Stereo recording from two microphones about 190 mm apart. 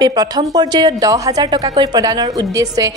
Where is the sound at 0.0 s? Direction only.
20° right (ahead or behind).